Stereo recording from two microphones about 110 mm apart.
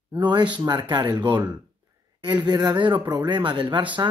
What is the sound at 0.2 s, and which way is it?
Speech, 45° right (ahead or behind).